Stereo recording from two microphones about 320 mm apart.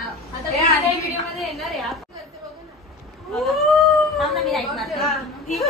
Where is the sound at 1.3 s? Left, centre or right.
Centre.